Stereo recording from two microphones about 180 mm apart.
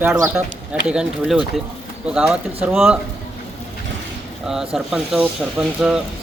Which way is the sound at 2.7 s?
Centre (ahead or behind).